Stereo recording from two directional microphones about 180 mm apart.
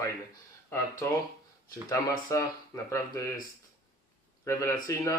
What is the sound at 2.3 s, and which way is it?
Speech, 20° left (ahead or behind).